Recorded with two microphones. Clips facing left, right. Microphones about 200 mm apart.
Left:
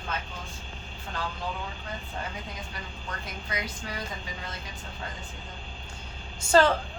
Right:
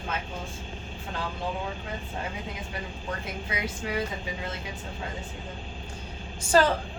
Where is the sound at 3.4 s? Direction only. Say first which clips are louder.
Right 3 dB; 25° right (ahead or behind).